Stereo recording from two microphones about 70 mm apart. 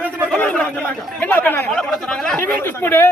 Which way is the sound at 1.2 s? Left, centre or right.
Left.